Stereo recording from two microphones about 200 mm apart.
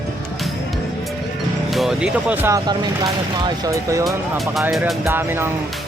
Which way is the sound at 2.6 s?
20° right (ahead or behind).